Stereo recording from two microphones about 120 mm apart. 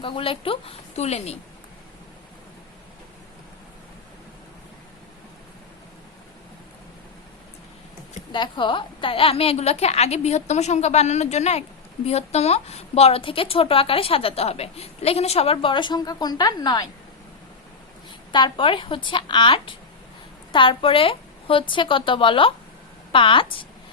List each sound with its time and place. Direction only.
0.0 s a woman's voice: 50° left (ahead or behind)
8.3 s a woman's voice: 40° left (ahead or behind)
18.3 s a woman's voice: 40° left (ahead or behind)